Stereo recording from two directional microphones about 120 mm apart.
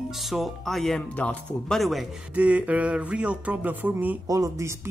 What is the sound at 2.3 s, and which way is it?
Speech, 10° right (ahead or behind).